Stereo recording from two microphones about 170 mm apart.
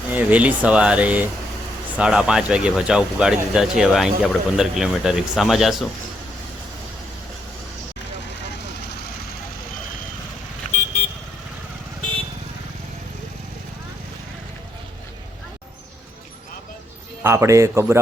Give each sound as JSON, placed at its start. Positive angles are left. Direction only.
{"t": 0.1, "sound": "speech", "side_deg": -10}
{"t": 17.2, "sound": "speech", "side_deg": -15}